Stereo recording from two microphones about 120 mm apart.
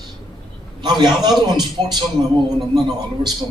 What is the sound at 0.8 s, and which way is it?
A man's voice, 35° right (ahead or behind).